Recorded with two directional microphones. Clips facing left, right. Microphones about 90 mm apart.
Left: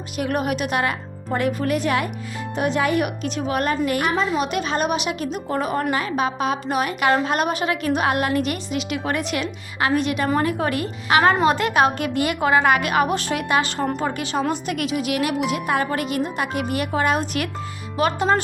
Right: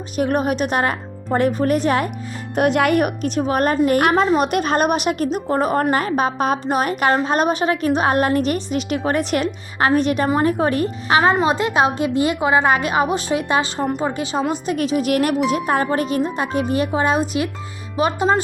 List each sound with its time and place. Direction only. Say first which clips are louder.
0.2 s a woman's voice: right 4 dB; 35° right (ahead or behind)
2.6 s speech: right 5 dB; 60° right (ahead or behind)
3.0 s a woman's voice: right 4 dB; 40° right (ahead or behind)
4.0 s a woman's voice: right 6 dB; 55° right (ahead or behind); by 14.4 s 20° right (ahead or behind)
14.7 s a woman's voice: right 5 dB; 30° right (ahead or behind)